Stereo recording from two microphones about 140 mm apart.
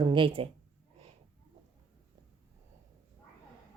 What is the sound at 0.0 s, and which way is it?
Speech, 35° right (ahead or behind).